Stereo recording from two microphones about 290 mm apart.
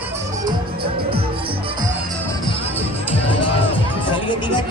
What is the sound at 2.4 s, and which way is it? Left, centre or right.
Music, centre.